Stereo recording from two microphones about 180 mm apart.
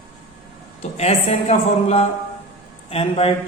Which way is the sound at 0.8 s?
35° left (ahead or behind).